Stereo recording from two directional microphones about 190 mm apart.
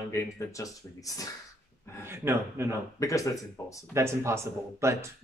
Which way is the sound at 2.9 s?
15° left (ahead or behind).